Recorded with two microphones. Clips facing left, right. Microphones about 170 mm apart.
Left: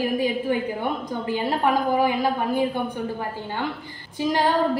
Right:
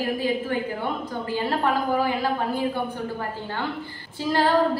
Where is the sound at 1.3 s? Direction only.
15° left (ahead or behind).